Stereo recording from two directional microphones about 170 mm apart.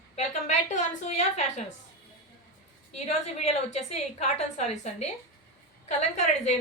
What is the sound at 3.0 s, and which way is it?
A woman's voice, 40° left (ahead or behind).